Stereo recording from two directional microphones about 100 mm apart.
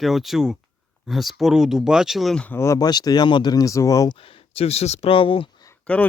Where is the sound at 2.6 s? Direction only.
35° left (ahead or behind).